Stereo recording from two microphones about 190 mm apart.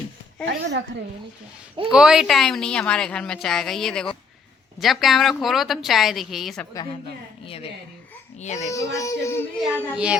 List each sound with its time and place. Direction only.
0.4 s a woman's voice: 65° right (ahead or behind)
1.9 s a woman's voice: 5° right (ahead or behind)
8.4 s a child's voice: 40° left (ahead or behind)
8.7 s a sound: 15° left (ahead or behind)
9.6 s a woman's voice: 5° right (ahead or behind)